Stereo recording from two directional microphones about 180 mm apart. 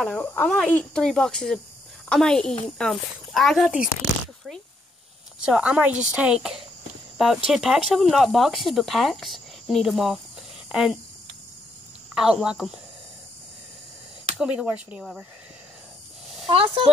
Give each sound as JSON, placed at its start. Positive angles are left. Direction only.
{"t": 0.0, "sound": "speech", "side_deg": 10}
{"t": 5.4, "sound": "speech", "side_deg": -5}
{"t": 12.2, "sound": "speech", "side_deg": -5}
{"t": 14.3, "sound": "speech", "side_deg": -5}
{"t": 16.4, "sound": "speech", "side_deg": -30}